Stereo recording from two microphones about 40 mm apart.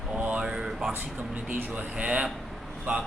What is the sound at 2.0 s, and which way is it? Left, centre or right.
Speech, right.